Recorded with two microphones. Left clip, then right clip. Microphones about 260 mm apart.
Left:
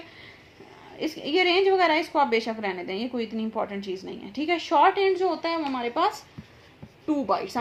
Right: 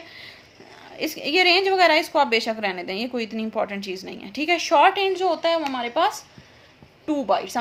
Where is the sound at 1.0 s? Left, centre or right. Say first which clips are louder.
Right 4 dB; right.